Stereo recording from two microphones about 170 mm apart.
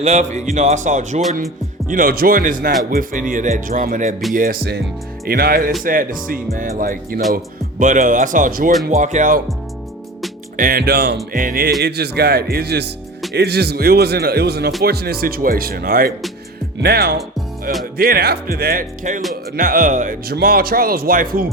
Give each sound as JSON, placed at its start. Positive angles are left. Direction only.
{"t": 0.0, "sound": "speech", "side_deg": -45}
{"t": 1.9, "sound": "speech", "side_deg": -55}
{"t": 10.6, "sound": "speech", "side_deg": -60}
{"t": 11.3, "sound": "speech", "side_deg": -55}
{"t": 11.8, "sound": "speech", "side_deg": -75}